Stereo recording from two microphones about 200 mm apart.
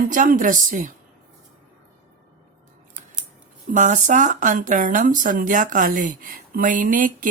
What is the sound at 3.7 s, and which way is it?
Speech, 40° right (ahead or behind).